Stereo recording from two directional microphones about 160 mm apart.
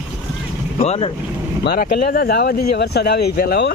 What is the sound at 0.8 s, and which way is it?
Speech, 35° left (ahead or behind).